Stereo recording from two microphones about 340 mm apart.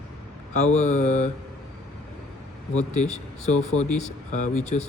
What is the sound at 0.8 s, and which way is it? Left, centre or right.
Speech, centre.